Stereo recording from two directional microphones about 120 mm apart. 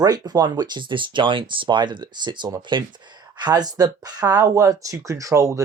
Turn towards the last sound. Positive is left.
turn(degrees=-25)  # may be behind; listen again after turning